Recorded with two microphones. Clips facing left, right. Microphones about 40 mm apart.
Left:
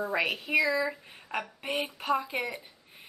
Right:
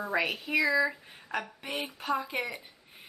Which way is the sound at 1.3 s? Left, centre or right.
Left.